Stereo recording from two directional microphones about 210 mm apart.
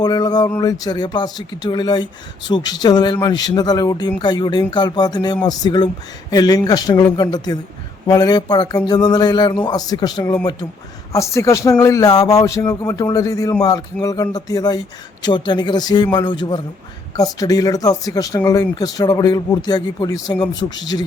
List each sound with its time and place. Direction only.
0.0 s a man's voice: 20° left (ahead or behind)